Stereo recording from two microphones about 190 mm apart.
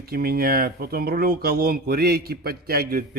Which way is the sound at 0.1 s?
55° right (ahead or behind).